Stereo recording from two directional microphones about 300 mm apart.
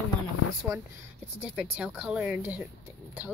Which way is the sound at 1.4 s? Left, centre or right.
Centre.